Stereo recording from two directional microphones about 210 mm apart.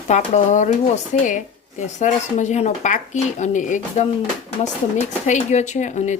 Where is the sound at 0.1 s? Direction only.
35° left (ahead or behind).